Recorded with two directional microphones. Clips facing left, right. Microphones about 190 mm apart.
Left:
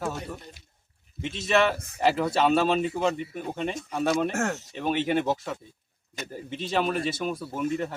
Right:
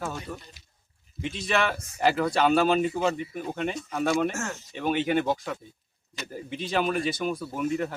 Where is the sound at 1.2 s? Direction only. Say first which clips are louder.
Left 3 dB; centre (ahead or behind).